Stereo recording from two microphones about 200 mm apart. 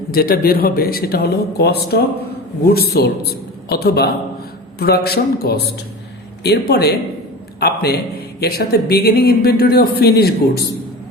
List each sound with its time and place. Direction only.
0.1 s speech: 50° left (ahead or behind)